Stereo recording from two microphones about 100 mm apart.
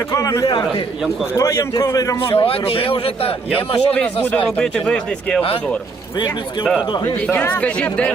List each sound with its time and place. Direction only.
0.1 s a man's voice: 30° left (ahead or behind)
2.3 s a man's voice: 65° left (ahead or behind)
3.8 s speech: 15° left (ahead or behind)
6.1 s a man's voice: 50° left (ahead or behind)
7.2 s speech: 15° left (ahead or behind)